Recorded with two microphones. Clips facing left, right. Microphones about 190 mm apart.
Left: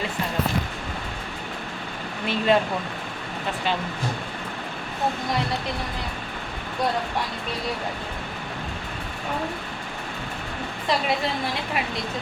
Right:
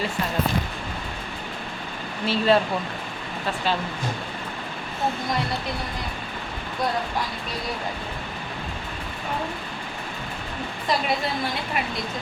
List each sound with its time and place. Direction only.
2.2 s speech: 15° left (ahead or behind)